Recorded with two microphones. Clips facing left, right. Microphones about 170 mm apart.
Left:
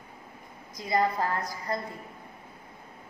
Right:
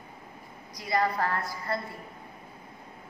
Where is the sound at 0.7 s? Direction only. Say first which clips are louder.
Left 1 dB; 20° left (ahead or behind).